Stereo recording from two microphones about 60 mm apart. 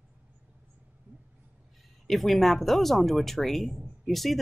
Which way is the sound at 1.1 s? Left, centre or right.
Right.